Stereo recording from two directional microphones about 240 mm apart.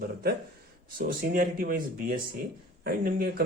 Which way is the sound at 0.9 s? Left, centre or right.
Right.